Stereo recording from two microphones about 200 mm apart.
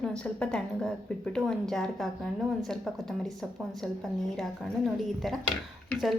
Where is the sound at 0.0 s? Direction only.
5° left (ahead or behind).